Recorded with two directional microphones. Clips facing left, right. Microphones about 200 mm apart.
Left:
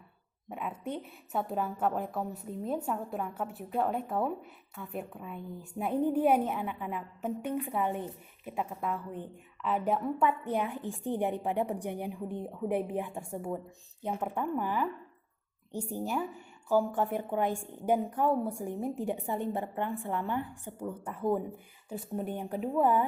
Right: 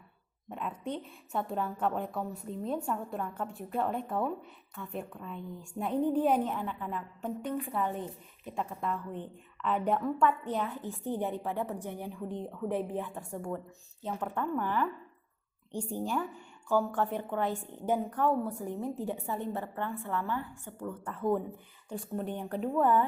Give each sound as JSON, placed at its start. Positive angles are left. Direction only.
{"t": 0.9, "sound": "a woman's voice", "side_deg": 5}
{"t": 10.0, "sound": "a woman's voice", "side_deg": 15}